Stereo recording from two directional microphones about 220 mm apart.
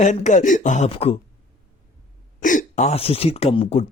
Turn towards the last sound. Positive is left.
turn(degrees=25)  # may be behind; listen again after turning